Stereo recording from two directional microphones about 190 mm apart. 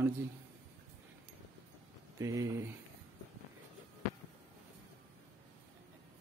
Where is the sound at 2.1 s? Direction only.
15° right (ahead or behind).